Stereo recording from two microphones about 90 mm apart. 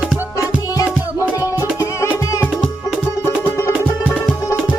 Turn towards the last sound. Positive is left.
turn(degrees=30)  # may be behind; listen again after turning